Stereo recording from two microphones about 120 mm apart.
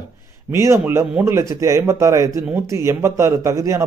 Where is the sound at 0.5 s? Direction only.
20° right (ahead or behind).